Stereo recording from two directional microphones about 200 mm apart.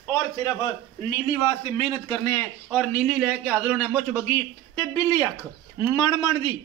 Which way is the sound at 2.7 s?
Centre (ahead or behind).